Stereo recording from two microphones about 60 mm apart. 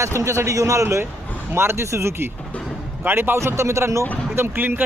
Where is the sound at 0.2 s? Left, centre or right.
Right.